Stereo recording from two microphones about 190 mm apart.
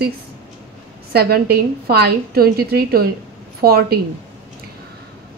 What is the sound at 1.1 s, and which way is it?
A woman's voice, 55° right (ahead or behind).